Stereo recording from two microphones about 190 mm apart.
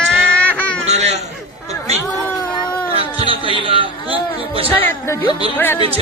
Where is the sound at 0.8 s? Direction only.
35° right (ahead or behind).